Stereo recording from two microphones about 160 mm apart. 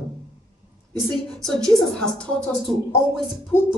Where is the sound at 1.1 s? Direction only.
5° left (ahead or behind).